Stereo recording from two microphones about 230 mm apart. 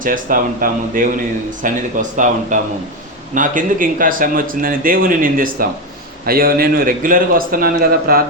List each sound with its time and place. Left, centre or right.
0.0 s speech: right